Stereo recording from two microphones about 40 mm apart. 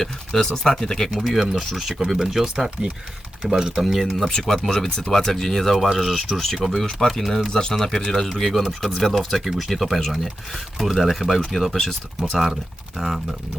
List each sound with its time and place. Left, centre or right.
0.0 s speech: centre
1.1 s speech: centre
3.8 s speech: centre
7.5 s speech: centre